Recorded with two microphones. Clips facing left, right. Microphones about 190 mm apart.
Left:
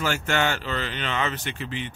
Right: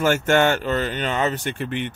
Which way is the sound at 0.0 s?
50° right (ahead or behind).